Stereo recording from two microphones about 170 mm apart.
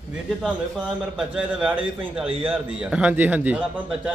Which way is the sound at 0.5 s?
5° right (ahead or behind).